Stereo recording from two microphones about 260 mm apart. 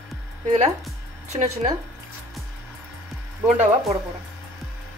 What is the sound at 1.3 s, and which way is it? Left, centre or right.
Speech, right.